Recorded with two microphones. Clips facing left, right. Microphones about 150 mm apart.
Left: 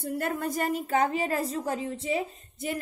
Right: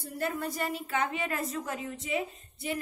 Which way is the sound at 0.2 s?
50° left (ahead or behind).